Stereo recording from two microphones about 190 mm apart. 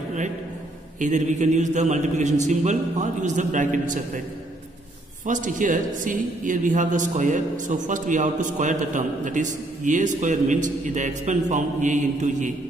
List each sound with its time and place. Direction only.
0.9 s a man's voice: 40° right (ahead or behind)
5.2 s a man's voice: 40° right (ahead or behind)